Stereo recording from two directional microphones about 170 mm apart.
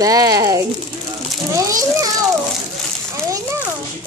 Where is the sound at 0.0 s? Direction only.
20° right (ahead or behind).